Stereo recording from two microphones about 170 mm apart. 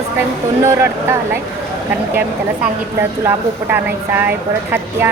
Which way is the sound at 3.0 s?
10° right (ahead or behind).